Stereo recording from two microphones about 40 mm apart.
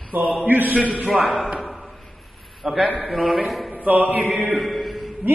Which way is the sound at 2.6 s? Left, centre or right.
Centre.